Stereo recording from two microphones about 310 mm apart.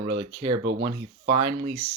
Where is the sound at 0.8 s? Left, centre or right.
Right.